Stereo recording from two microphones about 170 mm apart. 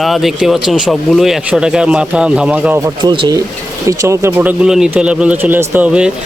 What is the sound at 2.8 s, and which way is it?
Speech, 25° right (ahead or behind).